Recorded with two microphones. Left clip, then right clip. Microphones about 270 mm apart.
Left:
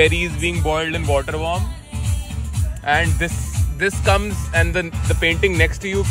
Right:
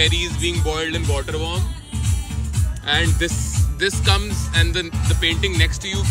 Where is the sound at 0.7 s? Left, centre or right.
Centre.